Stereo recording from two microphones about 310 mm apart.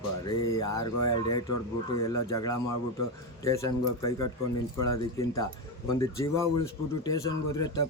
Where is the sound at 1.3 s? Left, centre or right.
Left.